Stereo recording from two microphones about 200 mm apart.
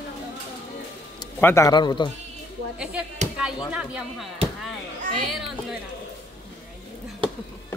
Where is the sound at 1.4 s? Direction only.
15° left (ahead or behind).